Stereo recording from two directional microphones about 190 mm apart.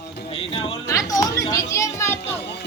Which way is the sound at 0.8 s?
15° left (ahead or behind).